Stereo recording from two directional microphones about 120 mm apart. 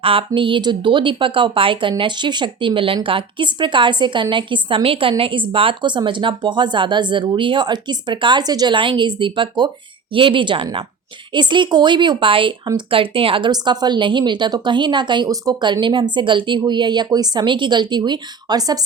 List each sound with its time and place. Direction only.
0.0 s a woman's voice: 50° right (ahead or behind); by 18.9 s 35° right (ahead or behind)